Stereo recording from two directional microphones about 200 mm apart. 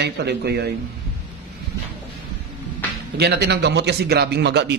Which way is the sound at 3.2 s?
55° right (ahead or behind).